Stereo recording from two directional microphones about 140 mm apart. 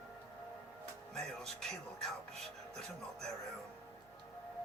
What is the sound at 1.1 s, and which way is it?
Music, 5° left (ahead or behind).